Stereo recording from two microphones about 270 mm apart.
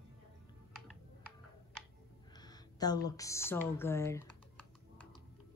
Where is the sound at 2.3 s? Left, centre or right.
Centre.